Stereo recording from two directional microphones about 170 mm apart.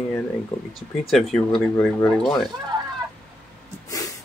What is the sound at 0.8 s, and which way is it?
Speech, centre (ahead or behind).